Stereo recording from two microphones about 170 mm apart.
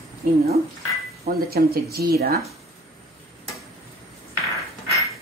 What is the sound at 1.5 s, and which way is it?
Speech, 65° right (ahead or behind).